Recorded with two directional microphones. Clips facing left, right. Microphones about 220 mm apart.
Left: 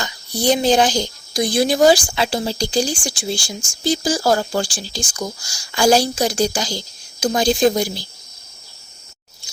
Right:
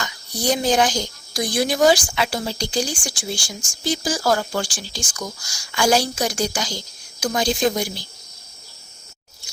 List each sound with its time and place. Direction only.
0.0 s speech: 30° left (ahead or behind)